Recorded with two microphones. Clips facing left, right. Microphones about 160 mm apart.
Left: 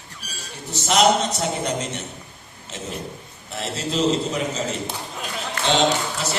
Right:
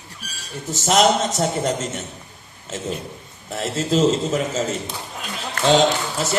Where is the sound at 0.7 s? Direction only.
45° right (ahead or behind).